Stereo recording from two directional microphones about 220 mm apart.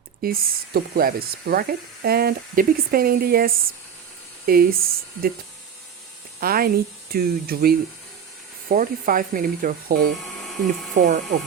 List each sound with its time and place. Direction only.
0.2 s speech: 40° right (ahead or behind)
6.4 s speech: 40° right (ahead or behind)
10.4 s mechanisms: centre (ahead or behind)
10.9 s speech: 35° right (ahead or behind)